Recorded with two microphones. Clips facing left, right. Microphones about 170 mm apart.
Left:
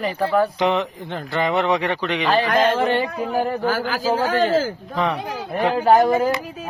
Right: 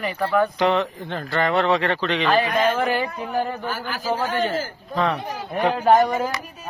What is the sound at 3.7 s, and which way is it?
A man's voice, 90° left.